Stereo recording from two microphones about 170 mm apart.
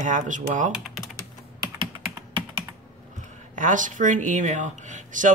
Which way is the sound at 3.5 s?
50° right (ahead or behind).